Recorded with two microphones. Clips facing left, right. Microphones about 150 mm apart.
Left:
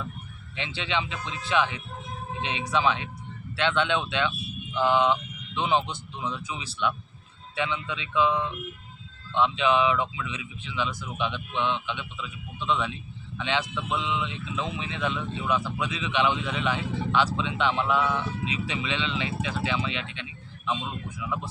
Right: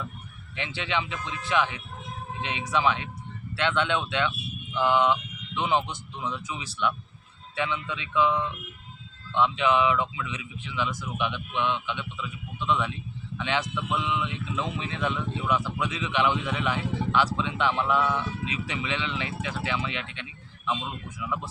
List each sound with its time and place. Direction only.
0.5 s speech: 25° left (ahead or behind)